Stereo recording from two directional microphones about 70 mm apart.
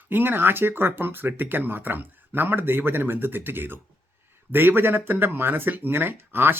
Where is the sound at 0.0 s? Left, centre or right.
Right.